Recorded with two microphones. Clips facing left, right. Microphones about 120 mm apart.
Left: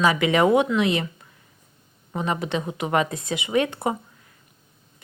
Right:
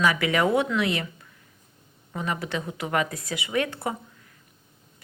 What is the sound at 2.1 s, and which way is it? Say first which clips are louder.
Speech: left 4 dB; 25° left (ahead or behind).